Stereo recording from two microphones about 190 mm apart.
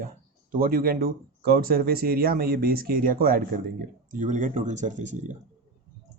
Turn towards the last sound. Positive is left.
turn(degrees=-40)  # may be behind; listen again after turning